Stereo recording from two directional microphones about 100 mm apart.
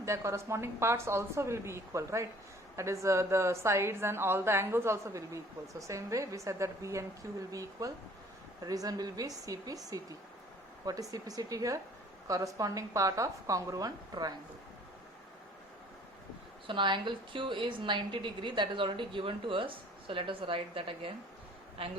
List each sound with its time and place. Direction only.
0.0 s a woman's voice: 30° right (ahead or behind)
16.6 s a woman's voice: 55° right (ahead or behind)